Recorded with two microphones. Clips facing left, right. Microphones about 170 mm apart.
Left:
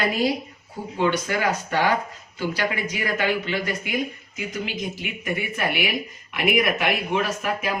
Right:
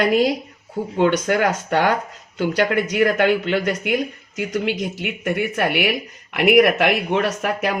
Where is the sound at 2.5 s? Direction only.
65° right (ahead or behind).